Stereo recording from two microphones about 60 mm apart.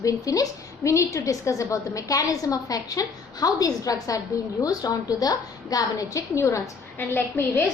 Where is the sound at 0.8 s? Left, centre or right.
Left.